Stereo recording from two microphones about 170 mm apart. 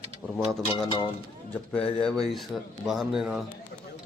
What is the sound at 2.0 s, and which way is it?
Speech, 5° left (ahead or behind).